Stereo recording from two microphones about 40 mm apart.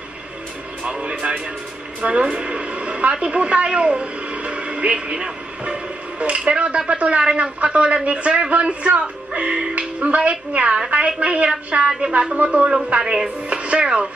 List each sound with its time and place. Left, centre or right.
0.8 s a woman's voice: right